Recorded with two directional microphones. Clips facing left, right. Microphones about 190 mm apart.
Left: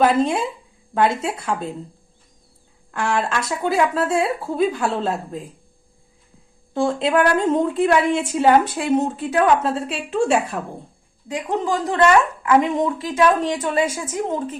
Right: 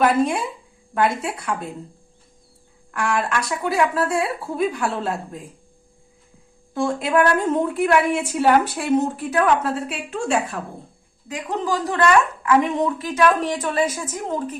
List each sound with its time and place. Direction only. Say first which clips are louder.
0.0 s a woman's voice: left 1 dB; 25° left (ahead or behind)
2.9 s a woman's voice: left 1 dB; 25° left (ahead or behind)
6.7 s a woman's voice: left 1 dB; 25° left (ahead or behind)
11.3 s a woman's voice: left 2 dB; 20° left (ahead or behind)